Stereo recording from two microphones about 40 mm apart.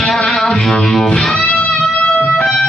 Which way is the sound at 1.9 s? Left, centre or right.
Left.